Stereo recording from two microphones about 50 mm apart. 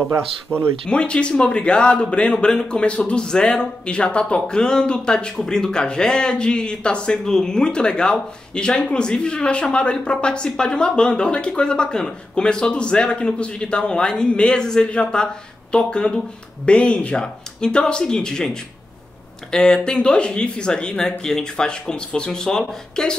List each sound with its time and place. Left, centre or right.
0.5 s a man's voice: left